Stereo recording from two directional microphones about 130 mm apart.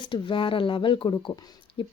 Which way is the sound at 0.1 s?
40° left (ahead or behind).